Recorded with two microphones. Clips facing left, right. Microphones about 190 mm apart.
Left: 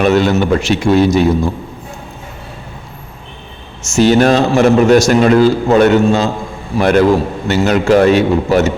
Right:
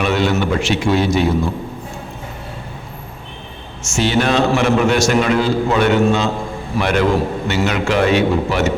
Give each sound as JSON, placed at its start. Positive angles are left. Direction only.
{"t": 0.0, "sound": "a man's voice", "side_deg": 45}
{"t": 3.9, "sound": "a man's voice", "side_deg": 45}